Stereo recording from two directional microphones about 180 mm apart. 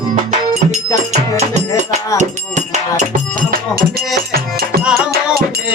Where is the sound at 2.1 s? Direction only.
40° right (ahead or behind).